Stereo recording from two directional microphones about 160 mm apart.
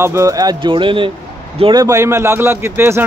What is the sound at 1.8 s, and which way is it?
Speech, 20° right (ahead or behind).